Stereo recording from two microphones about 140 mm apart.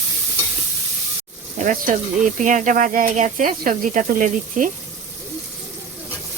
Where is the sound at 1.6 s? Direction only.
65° right (ahead or behind).